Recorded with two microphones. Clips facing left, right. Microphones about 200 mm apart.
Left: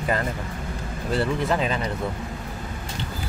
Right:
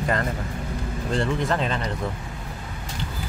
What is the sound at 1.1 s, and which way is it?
Speech, 5° left (ahead or behind).